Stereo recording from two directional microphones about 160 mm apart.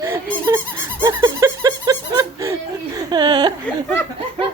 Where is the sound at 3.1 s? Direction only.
25° right (ahead or behind).